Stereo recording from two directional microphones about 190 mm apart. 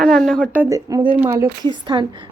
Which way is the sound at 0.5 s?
15° right (ahead or behind).